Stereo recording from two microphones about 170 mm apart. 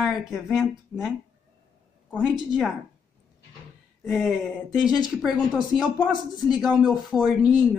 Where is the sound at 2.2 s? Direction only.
Centre (ahead or behind).